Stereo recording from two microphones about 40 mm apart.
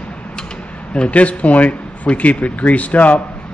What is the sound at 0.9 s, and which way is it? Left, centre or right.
Speech, left.